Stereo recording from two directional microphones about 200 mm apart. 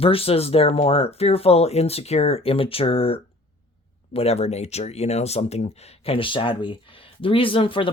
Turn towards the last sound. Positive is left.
turn(degrees=25)  # may be behind; listen again after turning